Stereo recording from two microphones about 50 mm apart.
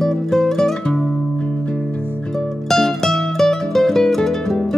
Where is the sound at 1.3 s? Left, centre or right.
Left.